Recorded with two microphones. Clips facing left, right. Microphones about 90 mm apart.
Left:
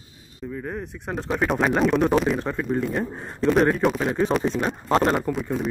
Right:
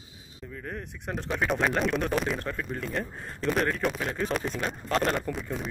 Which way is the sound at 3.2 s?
25° left (ahead or behind).